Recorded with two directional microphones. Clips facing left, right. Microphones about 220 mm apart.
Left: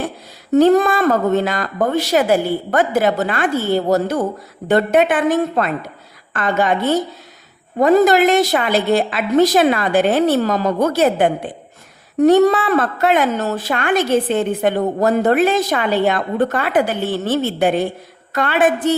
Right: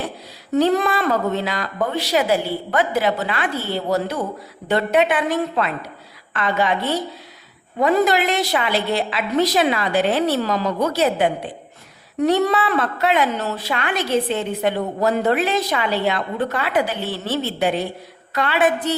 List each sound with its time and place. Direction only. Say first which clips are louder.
0.5 s a woman's voice: left 6 dB; 45° left (ahead or behind)